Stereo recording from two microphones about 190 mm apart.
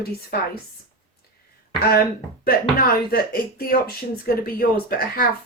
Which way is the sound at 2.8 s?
50° left (ahead or behind).